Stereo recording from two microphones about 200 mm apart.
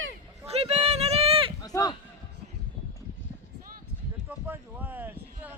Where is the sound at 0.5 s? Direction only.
30° right (ahead or behind).